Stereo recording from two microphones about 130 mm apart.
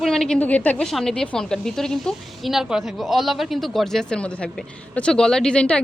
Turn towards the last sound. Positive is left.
turn(degrees=10)  # may be behind; listen again after turning